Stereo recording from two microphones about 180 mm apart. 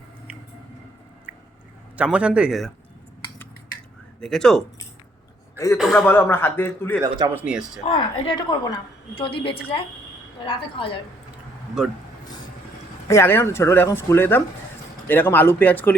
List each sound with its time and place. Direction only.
1.3 s squish: 10° right (ahead or behind)
2.0 s speech: 5° right (ahead or behind)
4.2 s speech: 5° left (ahead or behind)
5.7 s speech: centre (ahead or behind)
6.1 s speech: 10° left (ahead or behind)
7.3 s speech: 5° right (ahead or behind)
7.9 s a woman's voice: 30° left (ahead or behind)
11.8 s speech: centre (ahead or behind)
13.1 s speech: 15° left (ahead or behind)